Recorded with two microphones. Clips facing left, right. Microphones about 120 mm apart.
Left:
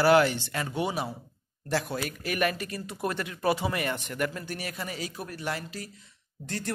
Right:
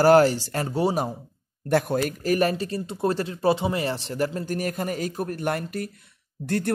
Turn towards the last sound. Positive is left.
turn(degrees=-60)  # may be behind; listen again after turning